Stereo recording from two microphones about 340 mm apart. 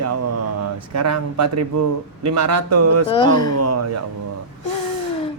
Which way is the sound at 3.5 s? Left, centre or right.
Right.